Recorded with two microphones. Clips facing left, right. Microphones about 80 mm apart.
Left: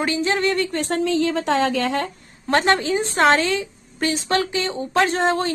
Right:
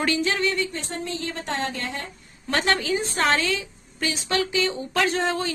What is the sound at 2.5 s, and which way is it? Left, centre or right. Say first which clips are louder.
Speech: left 5 dB; left.